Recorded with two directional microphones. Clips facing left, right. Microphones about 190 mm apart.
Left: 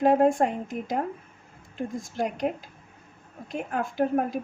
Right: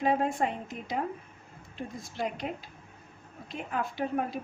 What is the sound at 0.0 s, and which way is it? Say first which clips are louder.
A woman's voice: left 7 dB; 50° left (ahead or behind).